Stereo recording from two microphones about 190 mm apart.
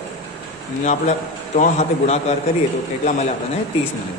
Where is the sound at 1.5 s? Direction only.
40° left (ahead or behind).